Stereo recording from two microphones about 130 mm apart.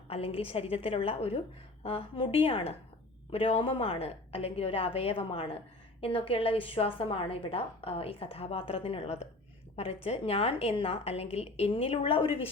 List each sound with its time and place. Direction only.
0.1 s a woman's voice: 50° left (ahead or behind)